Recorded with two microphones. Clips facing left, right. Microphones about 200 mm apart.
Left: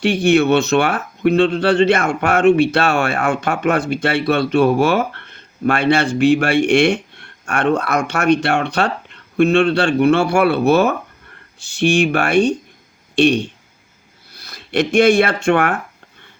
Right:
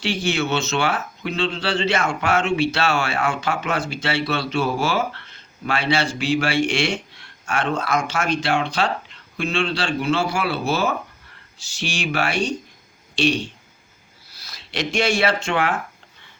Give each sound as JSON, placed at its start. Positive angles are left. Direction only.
{"t": 0.0, "sound": "speech", "side_deg": 55}